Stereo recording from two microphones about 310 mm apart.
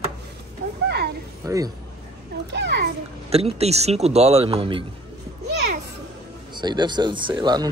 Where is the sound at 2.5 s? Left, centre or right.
Right.